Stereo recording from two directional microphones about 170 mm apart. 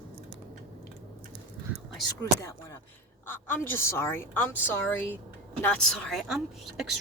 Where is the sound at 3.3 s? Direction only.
10° left (ahead or behind).